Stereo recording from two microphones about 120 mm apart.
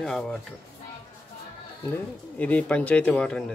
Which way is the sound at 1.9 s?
10° left (ahead or behind).